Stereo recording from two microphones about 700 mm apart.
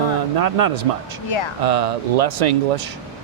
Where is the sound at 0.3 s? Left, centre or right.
Right.